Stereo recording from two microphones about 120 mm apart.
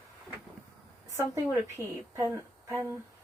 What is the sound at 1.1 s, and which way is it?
A woman's voice, 25° right (ahead or behind).